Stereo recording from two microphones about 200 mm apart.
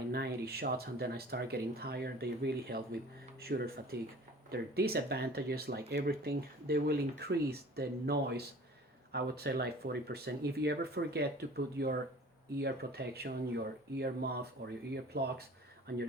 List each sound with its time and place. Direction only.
0.1 s speech: 50° right (ahead or behind)